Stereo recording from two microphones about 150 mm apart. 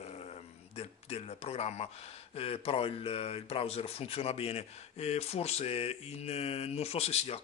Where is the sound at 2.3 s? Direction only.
40° left (ahead or behind).